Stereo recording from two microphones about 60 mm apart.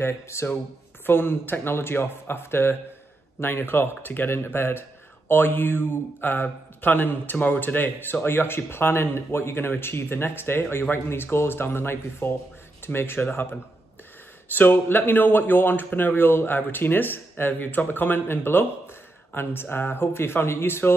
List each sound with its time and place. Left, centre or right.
0.0 s speech: left
1.0 s speech: left